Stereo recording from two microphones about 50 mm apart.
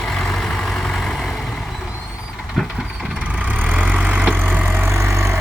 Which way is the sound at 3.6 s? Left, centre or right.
Right.